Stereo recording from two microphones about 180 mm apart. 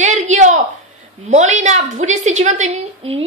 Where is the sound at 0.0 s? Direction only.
40° right (ahead or behind).